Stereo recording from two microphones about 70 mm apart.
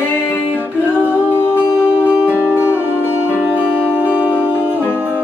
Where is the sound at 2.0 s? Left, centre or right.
Right.